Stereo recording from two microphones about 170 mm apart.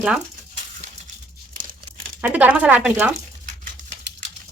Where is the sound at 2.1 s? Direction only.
10° right (ahead or behind).